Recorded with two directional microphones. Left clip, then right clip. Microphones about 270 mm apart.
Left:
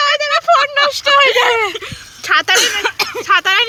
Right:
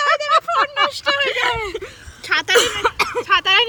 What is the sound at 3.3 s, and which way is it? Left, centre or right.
Speech, left.